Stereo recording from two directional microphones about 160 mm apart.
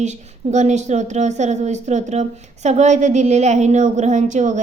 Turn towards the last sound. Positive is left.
turn(degrees=-50)  # may be behind; listen again after turning